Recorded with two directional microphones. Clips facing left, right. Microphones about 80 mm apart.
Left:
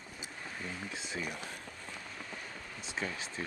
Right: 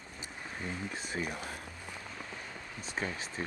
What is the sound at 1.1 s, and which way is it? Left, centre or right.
Speech, centre.